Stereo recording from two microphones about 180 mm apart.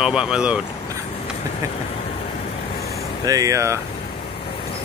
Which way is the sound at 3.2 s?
20° right (ahead or behind).